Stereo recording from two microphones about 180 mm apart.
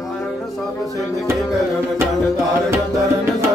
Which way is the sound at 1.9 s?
15° right (ahead or behind).